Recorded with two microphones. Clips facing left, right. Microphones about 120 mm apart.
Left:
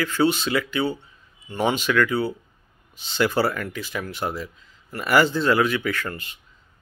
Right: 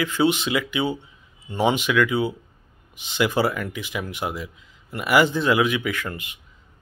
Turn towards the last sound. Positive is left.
turn(degrees=-15)  # may be behind; listen again after turning